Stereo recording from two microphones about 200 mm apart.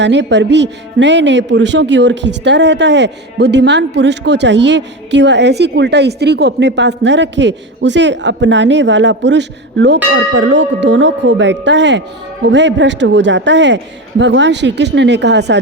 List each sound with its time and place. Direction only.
0.0 s speech: 60° right (ahead or behind)